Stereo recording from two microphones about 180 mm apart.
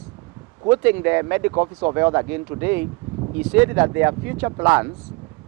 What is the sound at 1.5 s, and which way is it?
Speech, 25° right (ahead or behind).